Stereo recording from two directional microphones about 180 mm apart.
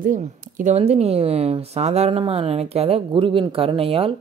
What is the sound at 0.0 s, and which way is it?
Speech, 45° right (ahead or behind).